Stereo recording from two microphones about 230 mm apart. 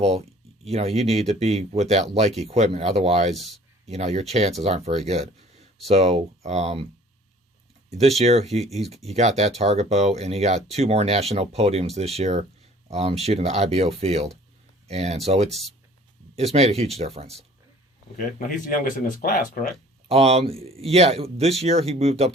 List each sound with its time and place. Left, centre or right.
0.6 s speech: right
3.3 s speech: centre
3.8 s speech: right
7.9 s speech: right
16.3 s speech: right
18.3 s speech: left
20.1 s speech: right